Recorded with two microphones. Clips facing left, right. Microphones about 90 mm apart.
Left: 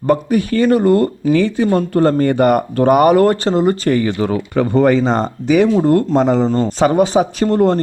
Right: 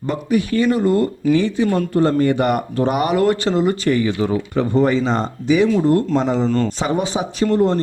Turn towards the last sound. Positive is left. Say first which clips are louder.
# left 3 dB
turn(degrees=55)  # may be behind; listen again after turning